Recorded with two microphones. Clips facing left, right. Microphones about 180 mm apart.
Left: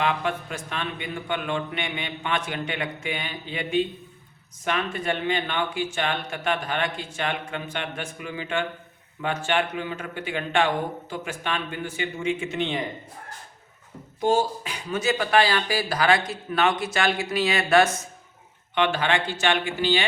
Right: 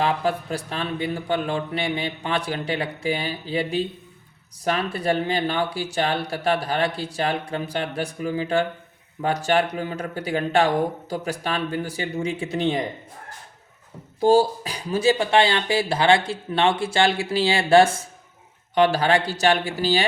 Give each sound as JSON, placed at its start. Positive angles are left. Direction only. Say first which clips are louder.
{"t": 0.0, "sound": "speech", "louder": "right 3 dB", "side_deg": -35}
{"t": 14.2, "sound": "speech", "louder": "right 5 dB", "side_deg": -35}